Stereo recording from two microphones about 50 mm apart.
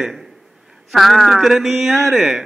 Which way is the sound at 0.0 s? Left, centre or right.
Centre.